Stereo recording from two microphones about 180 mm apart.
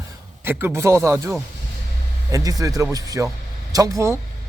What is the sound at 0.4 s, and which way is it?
Speech, 15° right (ahead or behind).